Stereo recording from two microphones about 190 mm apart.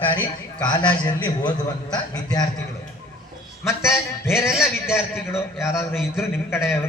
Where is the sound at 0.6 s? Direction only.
20° left (ahead or behind).